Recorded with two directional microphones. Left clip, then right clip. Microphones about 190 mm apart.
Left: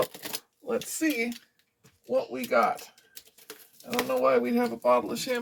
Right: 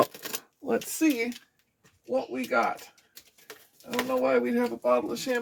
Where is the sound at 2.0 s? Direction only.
Centre (ahead or behind).